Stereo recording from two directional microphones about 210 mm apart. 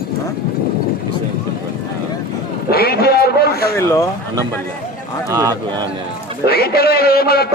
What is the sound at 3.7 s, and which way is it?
Speech, 15° left (ahead or behind).